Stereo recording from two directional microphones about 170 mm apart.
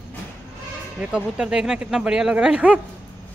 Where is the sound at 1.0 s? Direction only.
5° right (ahead or behind).